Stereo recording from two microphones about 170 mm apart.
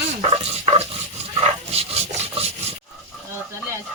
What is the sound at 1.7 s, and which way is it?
Rub, 40° right (ahead or behind).